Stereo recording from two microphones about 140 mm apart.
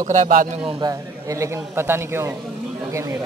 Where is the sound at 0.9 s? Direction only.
20° right (ahead or behind).